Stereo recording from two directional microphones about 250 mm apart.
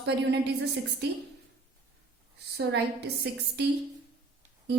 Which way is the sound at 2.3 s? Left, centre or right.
Right.